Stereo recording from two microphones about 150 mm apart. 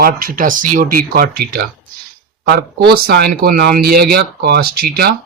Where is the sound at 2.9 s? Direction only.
90° right.